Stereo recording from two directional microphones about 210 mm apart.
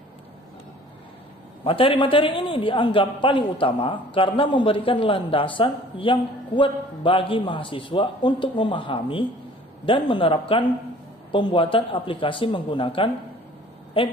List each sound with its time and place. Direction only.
1.6 s a man's voice: 25° left (ahead or behind)